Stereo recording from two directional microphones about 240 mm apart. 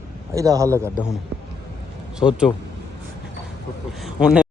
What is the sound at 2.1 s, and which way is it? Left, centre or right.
Speech, centre.